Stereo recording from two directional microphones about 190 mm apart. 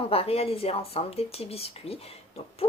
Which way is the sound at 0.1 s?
30° left (ahead or behind).